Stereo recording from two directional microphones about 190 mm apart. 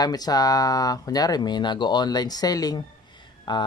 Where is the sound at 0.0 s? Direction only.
20° left (ahead or behind).